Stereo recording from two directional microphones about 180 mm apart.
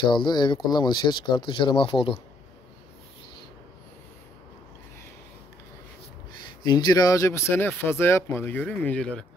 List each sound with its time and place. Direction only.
0.0 s speech: 25° left (ahead or behind)
6.6 s speech: 25° left (ahead or behind); by 9.2 s 5° left (ahead or behind)